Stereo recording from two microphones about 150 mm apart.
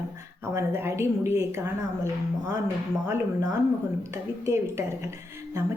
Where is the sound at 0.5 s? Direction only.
15° right (ahead or behind).